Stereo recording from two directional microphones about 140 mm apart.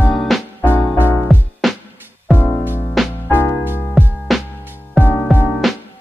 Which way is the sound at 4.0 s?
Centre (ahead or behind).